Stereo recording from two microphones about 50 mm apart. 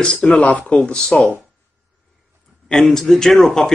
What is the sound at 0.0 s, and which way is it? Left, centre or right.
Speech, centre.